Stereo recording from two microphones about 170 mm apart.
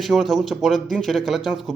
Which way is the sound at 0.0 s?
Centre (ahead or behind).